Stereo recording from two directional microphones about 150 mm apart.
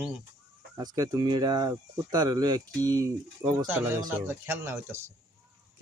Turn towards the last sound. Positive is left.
turn(degrees=-15)  # may be behind; listen again after turning